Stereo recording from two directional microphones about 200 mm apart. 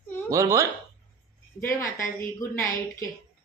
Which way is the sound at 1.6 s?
15° left (ahead or behind).